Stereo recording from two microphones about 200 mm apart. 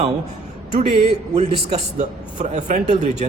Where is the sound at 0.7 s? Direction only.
30° right (ahead or behind).